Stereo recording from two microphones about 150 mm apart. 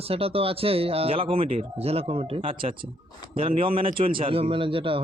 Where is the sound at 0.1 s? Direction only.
40° right (ahead or behind).